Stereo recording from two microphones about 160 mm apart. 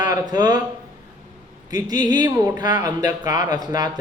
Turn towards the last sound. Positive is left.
turn(degrees=-25)  # may be behind; listen again after turning